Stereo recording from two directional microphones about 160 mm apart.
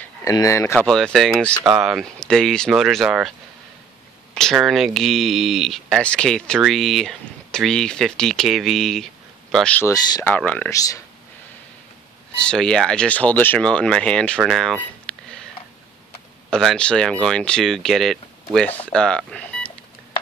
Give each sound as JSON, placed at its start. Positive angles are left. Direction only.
{"t": 0.0, "sound": "speech", "side_deg": 20}
{"t": 0.7, "sound": "speech", "side_deg": 5}
{"t": 9.8, "sound": "speech", "side_deg": 25}
{"t": 10.3, "sound": "speech", "side_deg": 10}
{"t": 10.7, "sound": "speech", "side_deg": 20}
{"t": 12.4, "sound": "speech", "side_deg": 5}
{"t": 16.4, "sound": "speech", "side_deg": 5}